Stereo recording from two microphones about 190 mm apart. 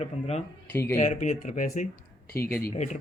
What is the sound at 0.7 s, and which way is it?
Speech, 15° left (ahead or behind).